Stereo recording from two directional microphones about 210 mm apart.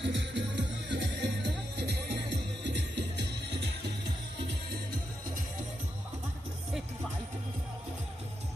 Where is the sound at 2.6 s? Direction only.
55° right (ahead or behind).